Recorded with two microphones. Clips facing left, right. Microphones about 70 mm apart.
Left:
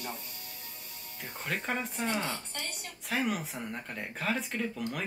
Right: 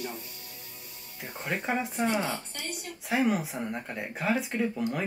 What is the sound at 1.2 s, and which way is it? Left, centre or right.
Speech, centre.